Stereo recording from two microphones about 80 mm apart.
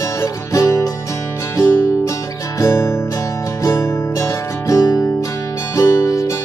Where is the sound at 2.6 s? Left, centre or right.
Left.